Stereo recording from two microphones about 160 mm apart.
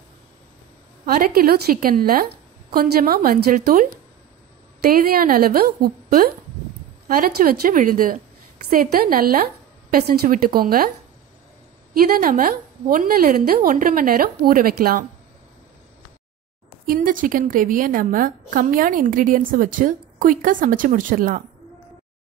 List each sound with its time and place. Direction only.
1.0 s a woman's voice: 65° right (ahead or behind)
3.6 s a woman's voice: 55° right (ahead or behind)
4.9 s a woman's voice: 65° right (ahead or behind)
11.9 s a woman's voice: 65° right (ahead or behind)
16.8 s a woman's voice: 60° right (ahead or behind)